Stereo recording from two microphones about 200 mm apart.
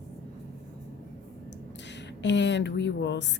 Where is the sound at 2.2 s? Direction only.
60° left (ahead or behind).